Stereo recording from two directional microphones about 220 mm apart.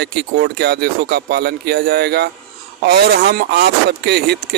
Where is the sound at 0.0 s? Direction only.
45° right (ahead or behind).